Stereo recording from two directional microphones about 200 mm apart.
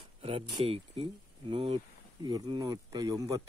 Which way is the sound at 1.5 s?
25° right (ahead or behind).